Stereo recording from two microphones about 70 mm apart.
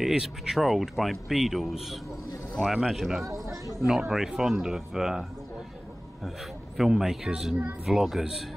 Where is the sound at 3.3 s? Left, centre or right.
Right.